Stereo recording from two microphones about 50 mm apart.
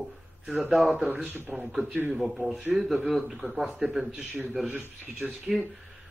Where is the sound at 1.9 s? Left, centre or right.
Right.